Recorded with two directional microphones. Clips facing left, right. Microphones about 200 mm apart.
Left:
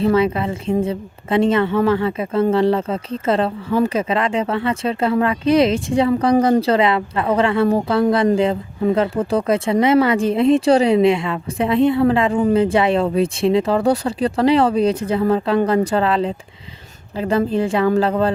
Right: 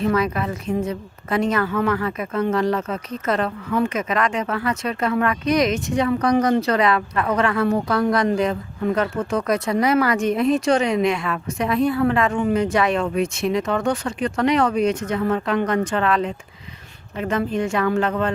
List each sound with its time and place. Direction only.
0.0 s a woman's voice: 25° left (ahead or behind)